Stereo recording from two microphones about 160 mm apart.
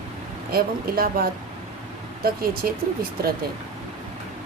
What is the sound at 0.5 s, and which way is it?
Speech, 70° right (ahead or behind).